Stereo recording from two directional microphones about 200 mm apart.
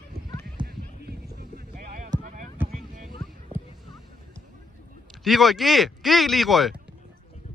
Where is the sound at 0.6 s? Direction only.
50° right (ahead or behind).